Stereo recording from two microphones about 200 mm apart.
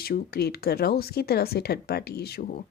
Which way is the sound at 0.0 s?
50° left (ahead or behind).